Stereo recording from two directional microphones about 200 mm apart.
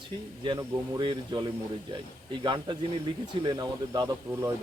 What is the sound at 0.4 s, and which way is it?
Speech, 20° right (ahead or behind).